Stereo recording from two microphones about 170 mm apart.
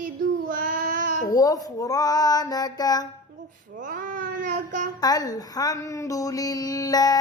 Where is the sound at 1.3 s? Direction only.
20° left (ahead or behind).